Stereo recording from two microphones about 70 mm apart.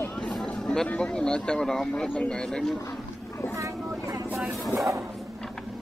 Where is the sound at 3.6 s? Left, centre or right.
Right.